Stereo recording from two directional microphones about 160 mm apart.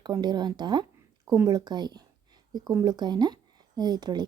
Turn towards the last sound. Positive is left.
turn(degrees=-25)  # may be behind; listen again after turning